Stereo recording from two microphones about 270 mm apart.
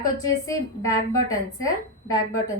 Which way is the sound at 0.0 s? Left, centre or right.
Centre.